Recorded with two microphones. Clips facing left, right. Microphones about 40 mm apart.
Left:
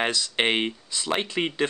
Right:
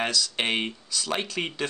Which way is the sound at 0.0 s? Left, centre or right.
Left.